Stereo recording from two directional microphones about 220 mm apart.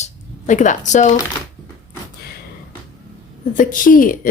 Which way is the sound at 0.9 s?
35° left (ahead or behind).